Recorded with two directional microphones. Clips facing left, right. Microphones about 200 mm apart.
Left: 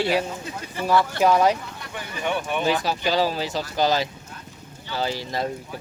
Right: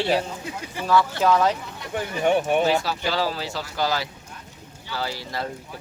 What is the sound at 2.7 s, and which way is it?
Speech, 15° left (ahead or behind).